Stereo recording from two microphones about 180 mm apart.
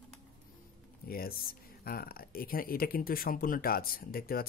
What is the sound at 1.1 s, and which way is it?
Speech, 55° left (ahead or behind).